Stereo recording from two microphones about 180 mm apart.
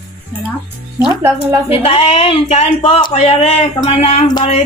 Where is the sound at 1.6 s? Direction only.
30° left (ahead or behind).